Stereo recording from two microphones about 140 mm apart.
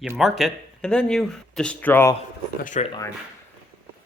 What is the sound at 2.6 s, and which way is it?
Speech, 60° left (ahead or behind).